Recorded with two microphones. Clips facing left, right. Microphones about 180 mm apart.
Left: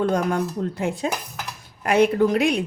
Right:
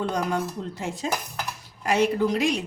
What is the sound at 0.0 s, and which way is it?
A woman's voice, 50° left (ahead or behind).